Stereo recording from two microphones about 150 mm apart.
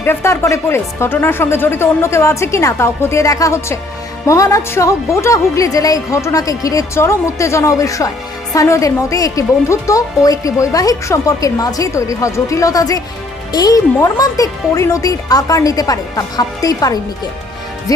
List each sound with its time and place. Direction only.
0.0 s a woman's voice: 15° left (ahead or behind)